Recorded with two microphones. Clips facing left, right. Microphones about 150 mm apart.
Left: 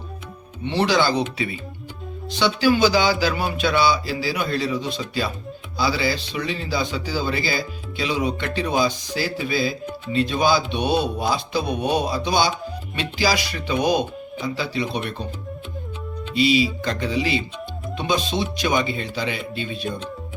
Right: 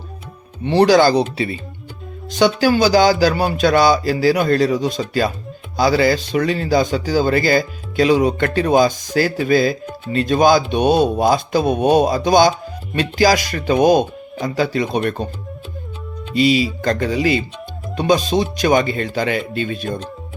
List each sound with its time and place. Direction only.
0.6 s speech: 45° right (ahead or behind)
2.3 s speech: 45° right (ahead or behind)
16.3 s speech: 45° right (ahead or behind)